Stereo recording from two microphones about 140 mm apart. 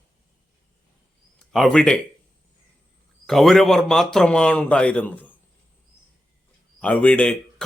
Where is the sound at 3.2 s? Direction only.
Centre (ahead or behind).